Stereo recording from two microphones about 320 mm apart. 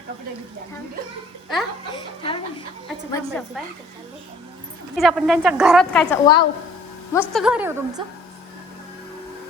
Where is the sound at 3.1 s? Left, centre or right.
Centre.